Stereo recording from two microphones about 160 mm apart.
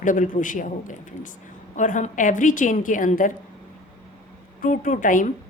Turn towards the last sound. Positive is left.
turn(degrees=55)  # may be behind; listen again after turning